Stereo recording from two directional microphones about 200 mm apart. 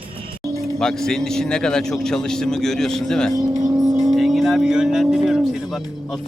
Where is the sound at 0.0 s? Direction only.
25° right (ahead or behind).